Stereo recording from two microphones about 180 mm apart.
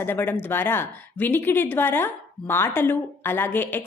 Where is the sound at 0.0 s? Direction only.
10° left (ahead or behind).